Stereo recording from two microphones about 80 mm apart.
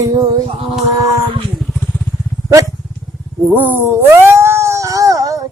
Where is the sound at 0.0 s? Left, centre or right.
Right.